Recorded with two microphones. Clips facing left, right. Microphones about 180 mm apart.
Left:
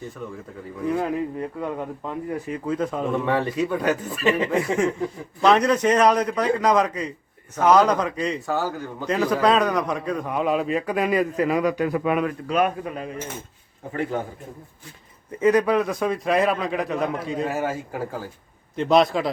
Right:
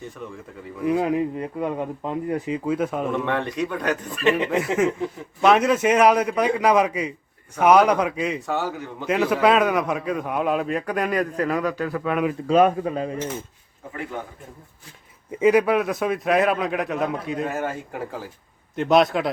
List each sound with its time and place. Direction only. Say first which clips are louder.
0.8 s speech: right 3 dB; 15° right (ahead or behind)
2.6 s speech: even; 10° right (ahead or behind)
3.1 s a man's voice: left 2 dB; 5° left (ahead or behind)
12.5 s speech: right 8 dB; 30° right (ahead or behind)
13.9 s a man's voice: left 6 dB; 35° left (ahead or behind)
15.4 s a man's voice: right 1 dB; 10° right (ahead or behind)